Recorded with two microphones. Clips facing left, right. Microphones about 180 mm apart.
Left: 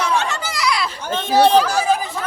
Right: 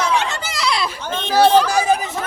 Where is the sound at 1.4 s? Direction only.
Centre (ahead or behind).